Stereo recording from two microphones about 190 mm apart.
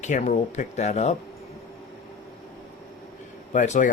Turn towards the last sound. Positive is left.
turn(degrees=40)  # may be behind; listen again after turning